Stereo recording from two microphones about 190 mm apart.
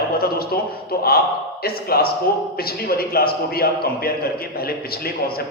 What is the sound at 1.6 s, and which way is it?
Speech, 55° left (ahead or behind).